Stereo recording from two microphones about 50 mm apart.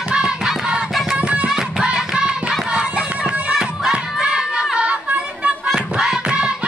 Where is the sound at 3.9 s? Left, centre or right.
Centre.